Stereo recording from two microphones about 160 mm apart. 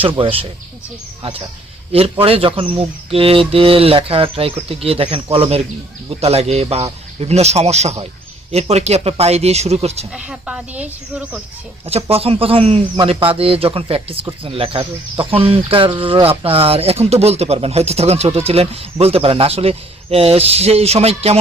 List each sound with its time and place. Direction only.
0.2 s speech: 35° right (ahead or behind)
1.9 s speech: 35° right (ahead or behind)
10.1 s speech: 5° right (ahead or behind)
11.9 s speech: 40° right (ahead or behind)